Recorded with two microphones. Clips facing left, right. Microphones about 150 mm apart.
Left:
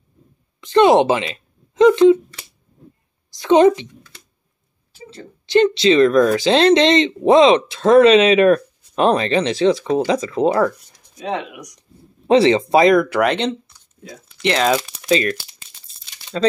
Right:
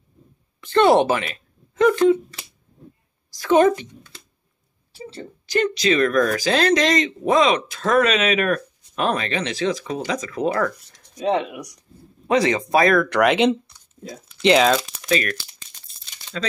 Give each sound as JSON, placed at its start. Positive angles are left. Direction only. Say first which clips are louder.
{"t": 0.6, "sound": "a sound", "louder": "left 3 dB", "side_deg": 15}
{"t": 3.3, "sound": "a woman's voice", "louder": "left 4 dB", "side_deg": 20}
{"t": 5.5, "sound": "speech", "louder": "left 6 dB", "side_deg": 25}
{"t": 12.3, "sound": "speech", "louder": "left 6 dB", "side_deg": 30}
{"t": 13.1, "sound": "speech", "louder": "right 1 dB", "side_deg": 0}
{"t": 14.6, "sound": "speech", "louder": "even", "side_deg": 0}
{"t": 15.0, "sound": "speech", "louder": "left 5 dB", "side_deg": 25}